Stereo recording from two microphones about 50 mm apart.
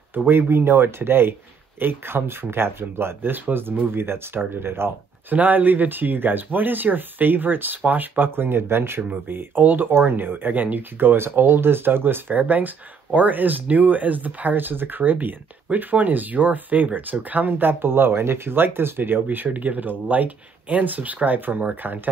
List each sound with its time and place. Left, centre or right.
0.1 s speech: right
5.3 s speech: right
9.3 s speech: right